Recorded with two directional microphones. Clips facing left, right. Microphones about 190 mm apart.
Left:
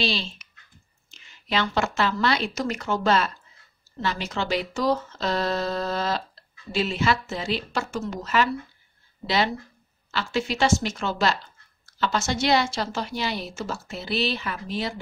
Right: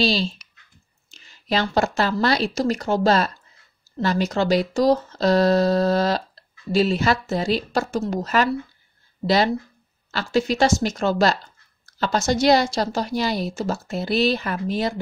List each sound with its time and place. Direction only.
0.0 s a woman's voice: 40° right (ahead or behind)